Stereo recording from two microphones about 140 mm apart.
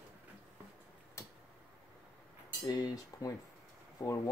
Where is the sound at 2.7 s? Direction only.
25° left (ahead or behind).